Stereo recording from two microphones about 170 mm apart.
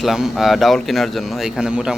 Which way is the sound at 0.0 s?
Centre (ahead or behind).